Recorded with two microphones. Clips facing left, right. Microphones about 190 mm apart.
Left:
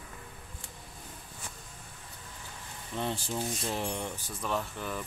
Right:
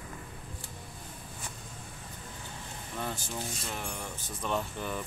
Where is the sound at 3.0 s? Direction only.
25° left (ahead or behind).